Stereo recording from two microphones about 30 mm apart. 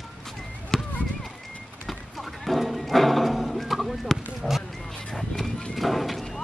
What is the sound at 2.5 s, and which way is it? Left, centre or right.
Music, centre.